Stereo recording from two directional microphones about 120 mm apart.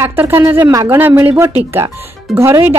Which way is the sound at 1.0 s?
15° right (ahead or behind).